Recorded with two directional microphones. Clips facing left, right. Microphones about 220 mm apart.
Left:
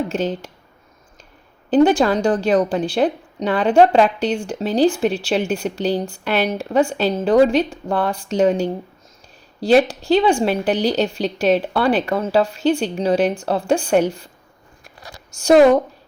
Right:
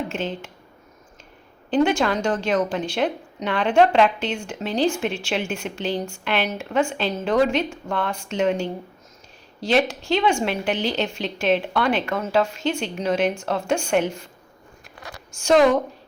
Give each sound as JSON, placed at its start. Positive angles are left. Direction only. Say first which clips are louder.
{"t": 0.1, "sound": "a woman's voice", "louder": "left 6 dB", "side_deg": 35}
{"t": 1.7, "sound": "a woman's voice", "louder": "left 6 dB", "side_deg": 35}
{"t": 15.0, "sound": "a sound", "louder": "left 6 dB", "side_deg": 35}